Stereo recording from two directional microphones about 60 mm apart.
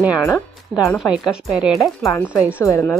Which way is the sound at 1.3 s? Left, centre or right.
Centre.